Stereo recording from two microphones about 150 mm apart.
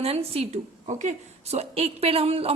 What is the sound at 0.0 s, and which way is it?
A woman's voice, 40° right (ahead or behind).